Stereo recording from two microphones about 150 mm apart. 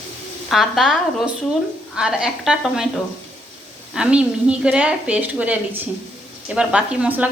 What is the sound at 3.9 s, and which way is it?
A woman's voice, 5° right (ahead or behind).